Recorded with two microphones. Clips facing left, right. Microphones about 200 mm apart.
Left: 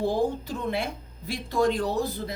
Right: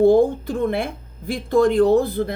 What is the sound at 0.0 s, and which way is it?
Speech, 55° right (ahead or behind).